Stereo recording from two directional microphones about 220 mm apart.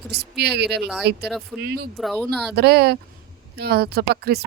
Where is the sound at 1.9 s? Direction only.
Centre (ahead or behind).